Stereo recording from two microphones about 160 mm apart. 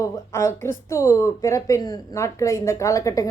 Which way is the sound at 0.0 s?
20° left (ahead or behind).